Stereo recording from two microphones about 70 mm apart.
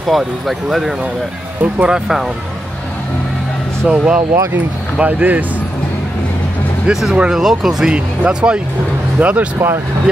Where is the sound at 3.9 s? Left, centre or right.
Centre.